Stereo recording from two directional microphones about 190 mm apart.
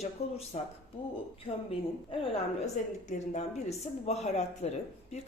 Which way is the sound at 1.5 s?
30° left (ahead or behind).